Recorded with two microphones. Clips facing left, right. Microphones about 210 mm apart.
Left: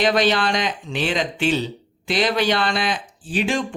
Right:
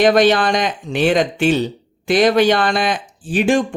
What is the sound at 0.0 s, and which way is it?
Speech, 50° right (ahead or behind).